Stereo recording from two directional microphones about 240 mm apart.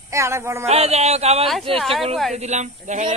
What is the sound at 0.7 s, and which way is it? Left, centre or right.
Speech, right.